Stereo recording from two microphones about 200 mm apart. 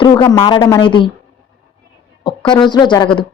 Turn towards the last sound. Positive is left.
turn(degrees=25)  # may be behind; listen again after turning